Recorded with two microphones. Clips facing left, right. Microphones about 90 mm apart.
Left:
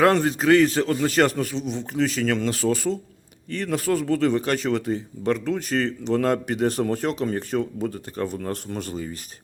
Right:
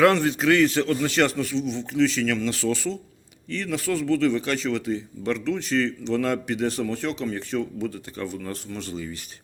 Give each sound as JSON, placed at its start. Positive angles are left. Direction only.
{"t": 0.0, "sound": "speech", "side_deg": 40}